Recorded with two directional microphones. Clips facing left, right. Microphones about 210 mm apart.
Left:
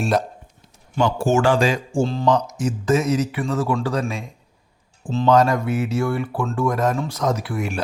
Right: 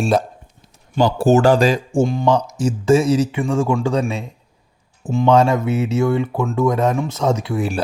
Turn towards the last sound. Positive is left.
turn(degrees=-30)  # may be behind; listen again after turning